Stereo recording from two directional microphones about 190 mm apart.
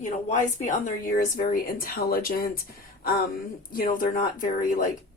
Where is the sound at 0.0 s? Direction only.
40° left (ahead or behind).